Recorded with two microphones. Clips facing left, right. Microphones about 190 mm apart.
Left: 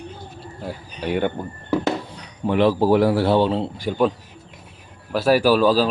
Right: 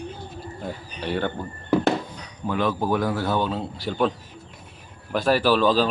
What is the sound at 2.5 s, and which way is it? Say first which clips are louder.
A man's voice: left 7 dB; 30° left (ahead or behind).